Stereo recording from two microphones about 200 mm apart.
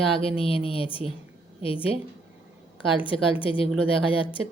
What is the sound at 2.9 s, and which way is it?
Speech, 25° left (ahead or behind).